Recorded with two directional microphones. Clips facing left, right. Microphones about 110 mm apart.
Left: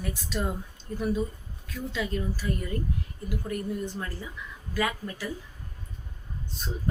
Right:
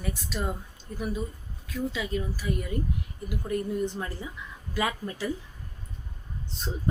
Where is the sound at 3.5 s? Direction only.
20° right (ahead or behind).